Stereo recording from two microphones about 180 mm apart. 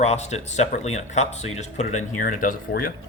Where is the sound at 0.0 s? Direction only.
35° left (ahead or behind); by 2.9 s 55° left (ahead or behind).